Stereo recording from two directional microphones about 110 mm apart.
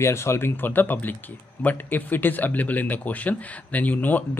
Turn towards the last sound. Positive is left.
turn(degrees=15)  # may be behind; listen again after turning